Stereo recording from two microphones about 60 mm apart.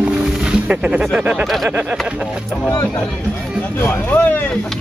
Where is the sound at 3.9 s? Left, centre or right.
Left.